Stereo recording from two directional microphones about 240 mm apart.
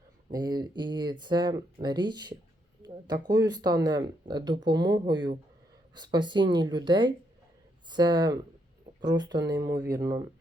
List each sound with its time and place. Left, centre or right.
0.3 s speech: centre